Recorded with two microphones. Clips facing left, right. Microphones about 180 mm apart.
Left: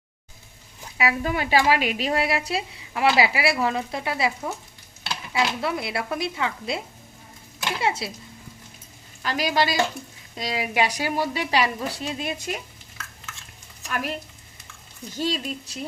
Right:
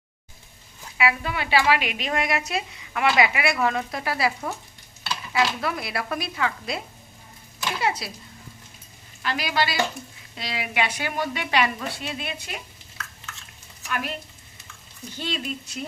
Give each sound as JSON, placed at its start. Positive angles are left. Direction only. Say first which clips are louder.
{"t": 0.9, "sound": "a woman's voice", "louder": "left 1 dB", "side_deg": 40}
{"t": 5.5, "sound": "speech", "louder": "left 2 dB", "side_deg": 25}
{"t": 9.2, "sound": "a woman's voice", "louder": "left 2 dB", "side_deg": 40}
{"t": 13.8, "sound": "speech", "louder": "left 1 dB", "side_deg": 35}
{"t": 15.2, "sound": "a woman's voice", "louder": "left 4 dB", "side_deg": 35}